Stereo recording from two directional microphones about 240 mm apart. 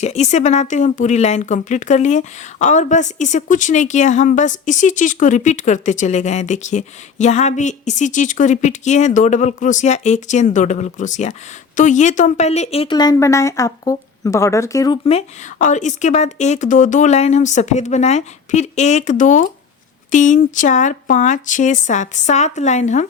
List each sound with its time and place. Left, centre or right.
0.0 s a woman's voice: left